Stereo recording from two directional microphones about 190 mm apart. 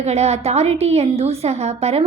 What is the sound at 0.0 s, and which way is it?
A woman's voice, 35° right (ahead or behind).